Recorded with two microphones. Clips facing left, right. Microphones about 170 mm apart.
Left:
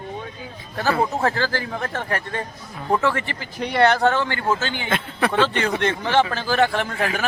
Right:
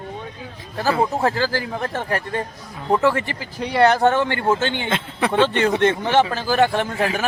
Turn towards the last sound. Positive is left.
turn(degrees=-20)  # may be behind; listen again after turning